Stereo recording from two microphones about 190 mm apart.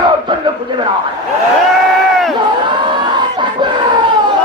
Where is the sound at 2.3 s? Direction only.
25° right (ahead or behind).